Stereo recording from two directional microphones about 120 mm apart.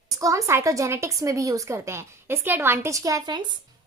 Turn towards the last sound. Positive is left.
turn(degrees=-30)  # may be behind; listen again after turning